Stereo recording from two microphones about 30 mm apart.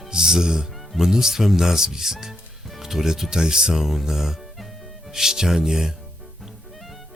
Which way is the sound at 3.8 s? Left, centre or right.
Centre.